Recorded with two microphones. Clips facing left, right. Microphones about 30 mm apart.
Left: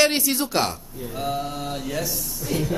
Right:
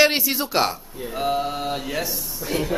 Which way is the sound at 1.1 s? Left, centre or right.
Right.